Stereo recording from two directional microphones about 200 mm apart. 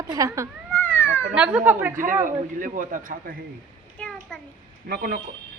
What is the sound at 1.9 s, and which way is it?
A man's voice, 40° right (ahead or behind).